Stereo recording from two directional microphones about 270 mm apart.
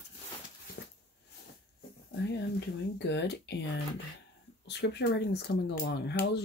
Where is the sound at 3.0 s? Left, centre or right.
Left.